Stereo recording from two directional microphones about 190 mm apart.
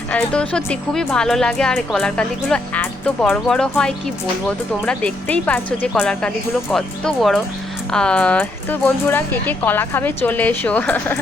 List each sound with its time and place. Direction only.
0.1 s speech: 5° left (ahead or behind)